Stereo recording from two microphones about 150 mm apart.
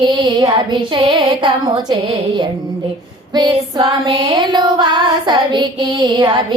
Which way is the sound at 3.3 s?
30° right (ahead or behind).